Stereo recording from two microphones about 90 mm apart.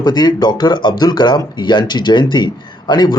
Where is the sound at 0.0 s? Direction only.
50° left (ahead or behind).